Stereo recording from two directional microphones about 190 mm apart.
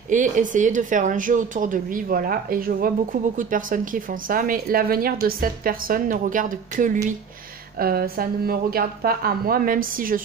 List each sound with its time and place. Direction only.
0.1 s speech: 40° right (ahead or behind)